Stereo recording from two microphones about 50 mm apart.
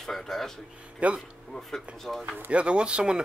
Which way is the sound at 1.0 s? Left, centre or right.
Right.